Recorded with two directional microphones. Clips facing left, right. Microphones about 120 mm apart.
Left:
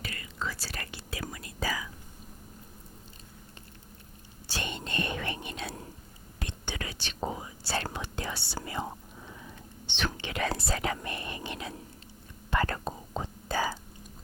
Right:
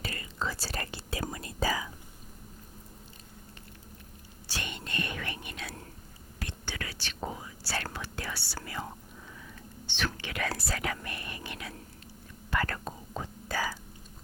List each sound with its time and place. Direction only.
0.0 s speech: 30° right (ahead or behind)
4.4 s whispering: 25° left (ahead or behind)
9.8 s speech: 20° left (ahead or behind)
12.5 s whispering: 25° left (ahead or behind)